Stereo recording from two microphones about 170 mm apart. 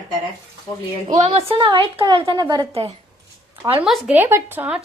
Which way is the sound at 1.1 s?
40° right (ahead or behind).